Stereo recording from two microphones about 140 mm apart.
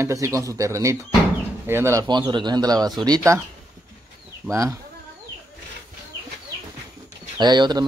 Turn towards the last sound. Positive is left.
turn(degrees=-30)  # may be behind; listen again after turning